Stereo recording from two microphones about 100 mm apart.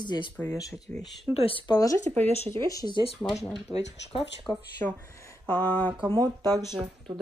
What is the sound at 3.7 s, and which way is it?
Speech, 35° left (ahead or behind).